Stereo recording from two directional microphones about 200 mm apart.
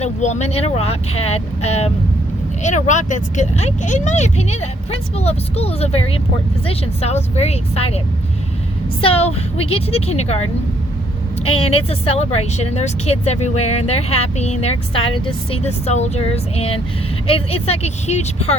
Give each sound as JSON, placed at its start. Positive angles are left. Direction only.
{"t": 0.0, "sound": "speech", "side_deg": 35}
{"t": 11.4, "sound": "speech", "side_deg": 30}